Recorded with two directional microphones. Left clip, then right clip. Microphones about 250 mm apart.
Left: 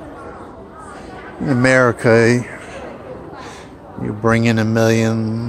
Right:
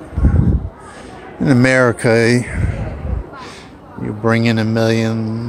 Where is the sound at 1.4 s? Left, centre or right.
Centre.